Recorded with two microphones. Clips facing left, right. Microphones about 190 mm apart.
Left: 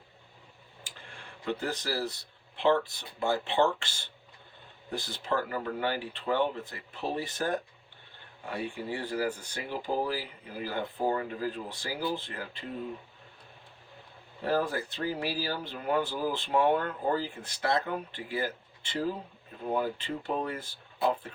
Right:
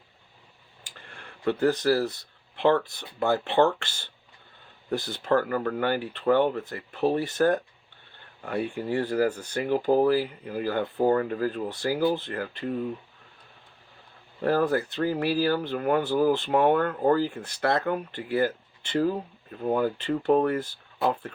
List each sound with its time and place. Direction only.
1.5 s speech: 60° right (ahead or behind)
3.2 s speech: 60° right (ahead or behind)
8.7 s speech: 55° right (ahead or behind)
14.4 s speech: 60° right (ahead or behind)